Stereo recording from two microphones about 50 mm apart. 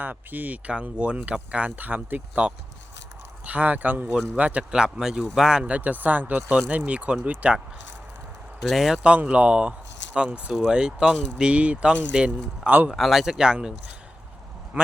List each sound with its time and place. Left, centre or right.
0.0 s speech: right
0.7 s speech: right
4.7 s speech: centre
5.6 s speech: right
8.7 s speech: centre
9.0 s speech: right
12.9 s speech: centre
13.4 s speech: centre